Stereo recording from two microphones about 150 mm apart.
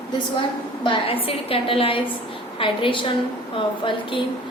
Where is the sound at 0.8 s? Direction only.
35° left (ahead or behind).